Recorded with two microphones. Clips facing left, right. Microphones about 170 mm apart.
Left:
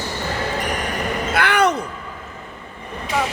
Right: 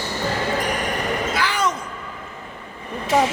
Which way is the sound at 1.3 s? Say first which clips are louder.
Left 5 dB; 60° left (ahead or behind).